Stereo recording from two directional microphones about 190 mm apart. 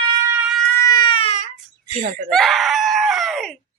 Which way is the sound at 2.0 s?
45° right (ahead or behind).